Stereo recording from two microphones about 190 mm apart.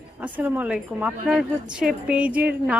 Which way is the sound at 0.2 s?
10° right (ahead or behind).